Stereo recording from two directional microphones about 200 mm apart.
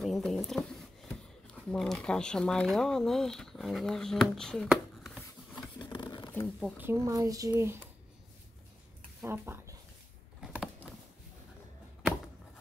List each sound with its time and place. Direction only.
0.0 s speech: centre (ahead or behind)
5.8 s a sound: 20° left (ahead or behind)
6.3 s speech: 5° left (ahead or behind)
6.8 s speech: 15° right (ahead or behind)
9.2 s speech: 10° right (ahead or behind)
10.4 s a sound: 5° right (ahead or behind)